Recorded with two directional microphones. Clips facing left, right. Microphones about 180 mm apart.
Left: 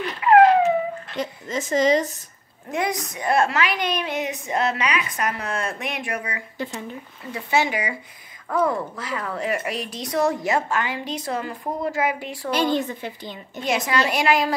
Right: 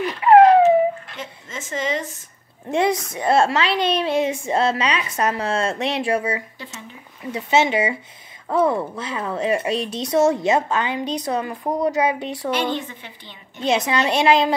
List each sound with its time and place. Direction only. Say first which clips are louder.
0.2 s a sound: right 3 dB; 30° right (ahead or behind)
1.1 s a woman's voice: left 7 dB; 35° left (ahead or behind)
3.2 s a woman's voice: right 2 dB; 25° right (ahead or behind)
12.4 s a woman's voice: left 2 dB; 40° left (ahead or behind)
13.7 s a woman's voice: right 3 dB; 20° right (ahead or behind)